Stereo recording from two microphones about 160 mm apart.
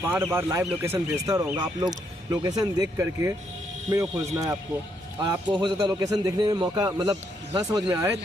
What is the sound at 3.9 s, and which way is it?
Speech, 20° right (ahead or behind).